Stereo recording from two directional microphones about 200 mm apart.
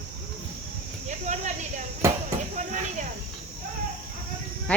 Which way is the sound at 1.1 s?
35° right (ahead or behind).